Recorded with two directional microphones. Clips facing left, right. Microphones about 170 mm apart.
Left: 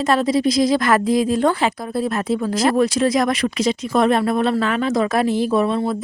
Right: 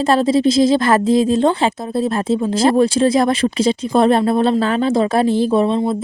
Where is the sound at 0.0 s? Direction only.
30° right (ahead or behind).